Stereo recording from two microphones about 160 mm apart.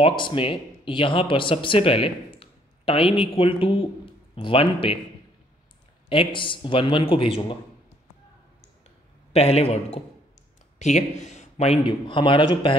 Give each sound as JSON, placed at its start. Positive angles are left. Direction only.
{"t": 0.0, "sound": "speech", "side_deg": 30}
{"t": 6.0, "sound": "a man's voice", "side_deg": 30}
{"t": 9.3, "sound": "a man's voice", "side_deg": 40}